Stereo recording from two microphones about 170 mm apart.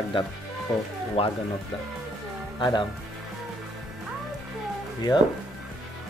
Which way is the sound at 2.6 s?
25° left (ahead or behind).